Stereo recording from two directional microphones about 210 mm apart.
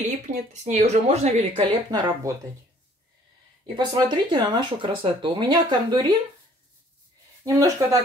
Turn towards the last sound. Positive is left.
turn(degrees=-15)  # may be behind; listen again after turning